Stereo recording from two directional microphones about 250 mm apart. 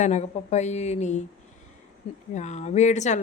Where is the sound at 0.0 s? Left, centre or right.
Left.